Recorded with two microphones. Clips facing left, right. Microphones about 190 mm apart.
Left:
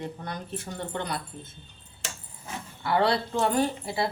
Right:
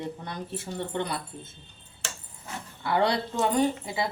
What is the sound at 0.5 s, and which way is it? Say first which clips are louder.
Speech: right 4 dB; 25° right (ahead or behind).